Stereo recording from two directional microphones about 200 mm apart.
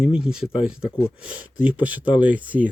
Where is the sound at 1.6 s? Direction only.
10° right (ahead or behind).